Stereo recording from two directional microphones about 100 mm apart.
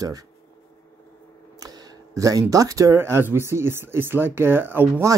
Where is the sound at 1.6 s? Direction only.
40° right (ahead or behind); by 4.9 s 20° right (ahead or behind).